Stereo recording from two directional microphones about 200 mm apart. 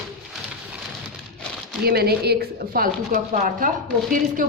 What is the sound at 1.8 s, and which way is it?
A woman's voice, 50° right (ahead or behind).